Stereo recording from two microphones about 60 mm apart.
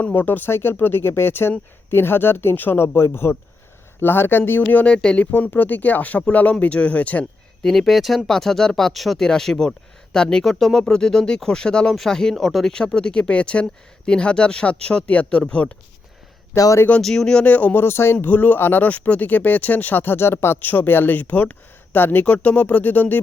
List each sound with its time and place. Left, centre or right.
0.1 s speech: left
4.6 s speech: left
5.3 s speech: left
7.6 s speech: centre
12.7 s speech: centre
17.0 s speech: centre
17.4 s speech: left
17.8 s speech: left
18.3 s speech: left
18.9 s speech: left